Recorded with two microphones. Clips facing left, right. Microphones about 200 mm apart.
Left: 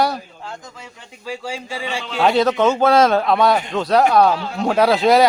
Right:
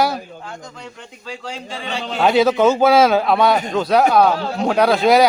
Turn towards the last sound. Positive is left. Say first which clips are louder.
# even
turn(degrees=0)  # may be behind; listen again after turning